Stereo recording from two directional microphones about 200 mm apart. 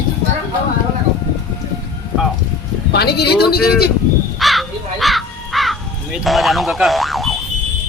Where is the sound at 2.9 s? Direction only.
55° left (ahead or behind).